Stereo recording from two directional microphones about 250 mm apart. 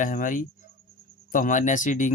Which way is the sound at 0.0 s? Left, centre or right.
Left.